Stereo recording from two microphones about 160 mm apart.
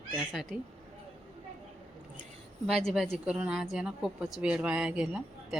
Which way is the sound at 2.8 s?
Centre (ahead or behind).